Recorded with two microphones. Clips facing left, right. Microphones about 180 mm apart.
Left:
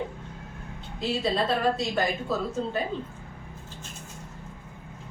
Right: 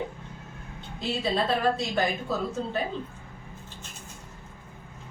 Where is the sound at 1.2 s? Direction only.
Centre (ahead or behind).